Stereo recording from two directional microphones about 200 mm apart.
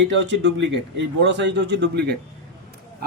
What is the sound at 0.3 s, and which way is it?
A man's voice, 65° right (ahead or behind).